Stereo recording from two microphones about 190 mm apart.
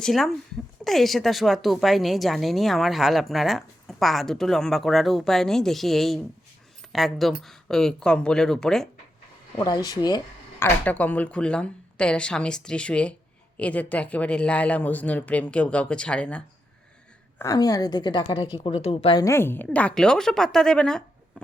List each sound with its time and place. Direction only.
0.0 s speech: centre (ahead or behind)
9.6 s a woman's voice: 20° left (ahead or behind)
10.6 s speech: 10° left (ahead or behind)
17.3 s a woman's voice: 15° left (ahead or behind)
19.2 s speech: 15° left (ahead or behind)